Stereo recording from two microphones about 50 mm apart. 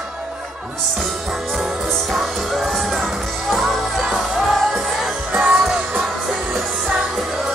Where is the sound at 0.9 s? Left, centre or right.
Centre.